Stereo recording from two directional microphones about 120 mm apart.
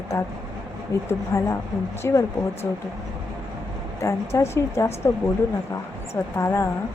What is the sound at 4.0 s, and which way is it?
A woman's voice, 25° left (ahead or behind).